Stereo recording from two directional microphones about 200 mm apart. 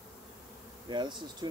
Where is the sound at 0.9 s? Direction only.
20° right (ahead or behind).